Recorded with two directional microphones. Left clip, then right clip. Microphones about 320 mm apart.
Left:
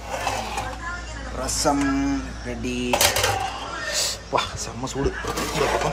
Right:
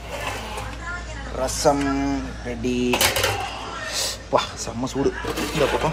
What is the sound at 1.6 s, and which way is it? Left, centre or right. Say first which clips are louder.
Speech: right 1 dB; centre.